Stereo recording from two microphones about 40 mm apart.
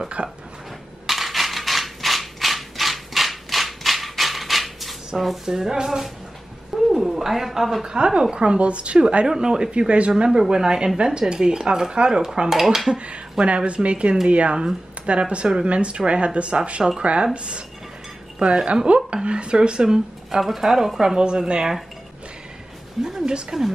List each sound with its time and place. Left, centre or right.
0.2 s speech: right
1.0 s a sound: centre
5.5 s speech: centre
7.8 s speech: right
9.3 s speech: centre
12.4 s speech: centre
12.9 s speech: right; by 21.2 s centre
21.2 s speech: right
23.0 s speech: right